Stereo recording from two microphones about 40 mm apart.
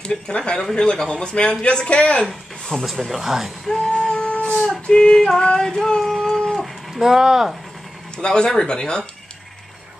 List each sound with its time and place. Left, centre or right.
0.0 s speech: left
2.2 s speech: centre
3.1 s speech: centre
3.9 s music: left
4.6 s female singing: left
5.4 s speech: centre
6.3 s dog: centre
6.6 s speech: centre
8.2 s speech: left